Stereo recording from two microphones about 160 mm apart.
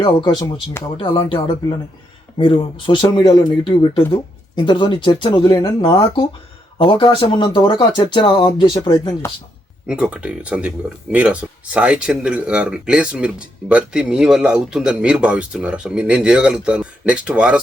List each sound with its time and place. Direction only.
0.0 s speech: 30° left (ahead or behind)
2.4 s speech: 30° left (ahead or behind)
9.8 s speech: 5° right (ahead or behind)